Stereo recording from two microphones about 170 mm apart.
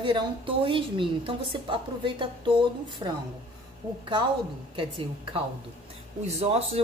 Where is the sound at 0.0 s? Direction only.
30° right (ahead or behind).